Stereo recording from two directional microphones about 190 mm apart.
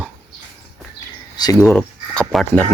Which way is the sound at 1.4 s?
15° left (ahead or behind).